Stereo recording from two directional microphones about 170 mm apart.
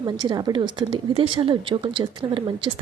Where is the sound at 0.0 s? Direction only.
25° right (ahead or behind).